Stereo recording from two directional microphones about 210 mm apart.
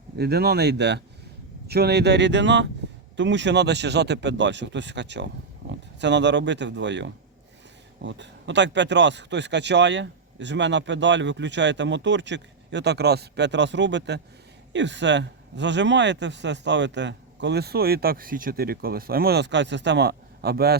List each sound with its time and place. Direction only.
0.2 s speech: 50° right (ahead or behind)